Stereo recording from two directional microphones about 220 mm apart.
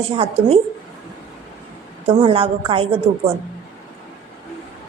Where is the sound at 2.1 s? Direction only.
25° right (ahead or behind).